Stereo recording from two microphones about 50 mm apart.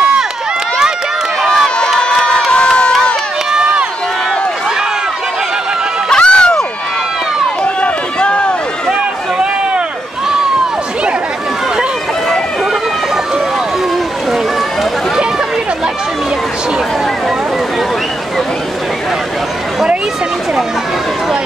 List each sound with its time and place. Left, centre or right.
1.4 s run: centre
2.5 s crowd: left
6.0 s a sound: centre
7.6 s run: left